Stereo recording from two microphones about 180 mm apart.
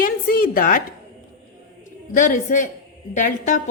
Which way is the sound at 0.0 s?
50° left (ahead or behind).